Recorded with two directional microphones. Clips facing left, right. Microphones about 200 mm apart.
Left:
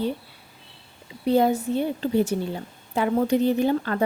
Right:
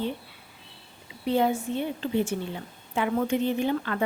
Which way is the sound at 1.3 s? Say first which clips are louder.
Left 4 dB; 40° left (ahead or behind).